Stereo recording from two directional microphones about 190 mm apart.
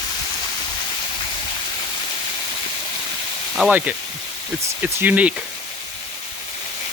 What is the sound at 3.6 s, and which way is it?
Speech, 10° right (ahead or behind).